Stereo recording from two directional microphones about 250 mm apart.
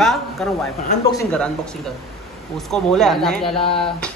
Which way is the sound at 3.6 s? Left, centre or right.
Left.